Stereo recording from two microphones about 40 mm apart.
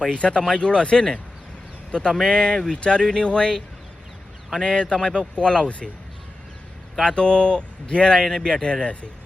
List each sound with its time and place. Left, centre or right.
0.1 s speech: left
7.0 s speech: left
8.6 s speech: left